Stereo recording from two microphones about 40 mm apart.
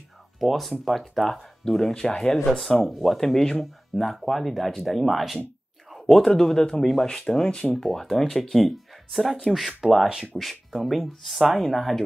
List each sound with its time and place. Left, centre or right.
0.4 s speech: centre
2.5 s speech: centre